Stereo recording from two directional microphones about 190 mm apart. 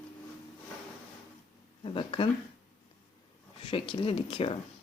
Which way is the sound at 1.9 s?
25° left (ahead or behind).